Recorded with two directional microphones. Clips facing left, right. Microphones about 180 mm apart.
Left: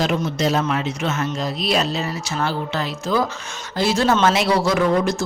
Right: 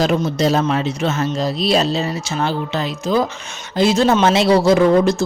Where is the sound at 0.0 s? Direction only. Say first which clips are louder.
Right 4 dB; 35° right (ahead or behind).